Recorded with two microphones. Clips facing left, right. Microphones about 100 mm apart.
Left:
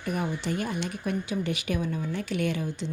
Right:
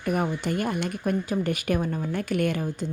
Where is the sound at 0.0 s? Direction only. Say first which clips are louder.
Right 4 dB; 50° right (ahead or behind).